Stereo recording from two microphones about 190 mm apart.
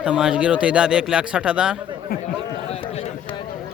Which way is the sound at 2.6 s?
35° left (ahead or behind).